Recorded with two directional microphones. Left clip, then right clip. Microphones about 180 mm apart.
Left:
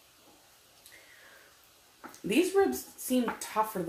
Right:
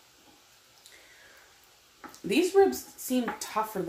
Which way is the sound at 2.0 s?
5° right (ahead or behind).